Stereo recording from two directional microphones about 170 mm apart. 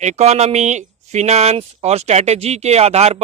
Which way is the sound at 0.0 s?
40° right (ahead or behind).